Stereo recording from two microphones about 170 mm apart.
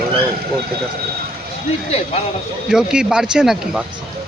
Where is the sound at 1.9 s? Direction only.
40° left (ahead or behind).